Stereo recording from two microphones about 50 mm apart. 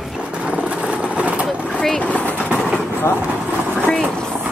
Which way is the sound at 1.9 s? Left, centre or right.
Left.